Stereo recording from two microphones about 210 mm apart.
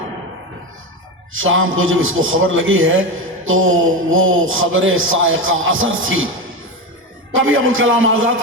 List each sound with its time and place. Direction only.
1.3 s a man's voice: 70° right (ahead or behind)
7.3 s a man's voice: 70° right (ahead or behind)